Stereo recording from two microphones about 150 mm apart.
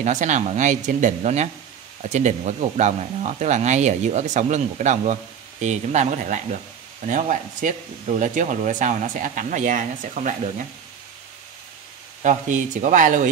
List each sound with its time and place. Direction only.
0.0 s speech: 55° right (ahead or behind)
12.2 s speech: 55° right (ahead or behind)